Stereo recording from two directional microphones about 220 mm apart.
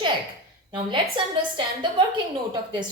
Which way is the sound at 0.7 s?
20° right (ahead or behind).